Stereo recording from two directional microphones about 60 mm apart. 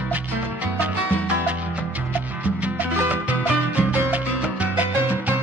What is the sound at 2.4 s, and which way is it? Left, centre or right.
Salsa music, right.